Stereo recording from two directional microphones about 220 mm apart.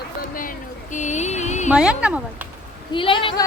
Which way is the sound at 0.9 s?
35° left (ahead or behind).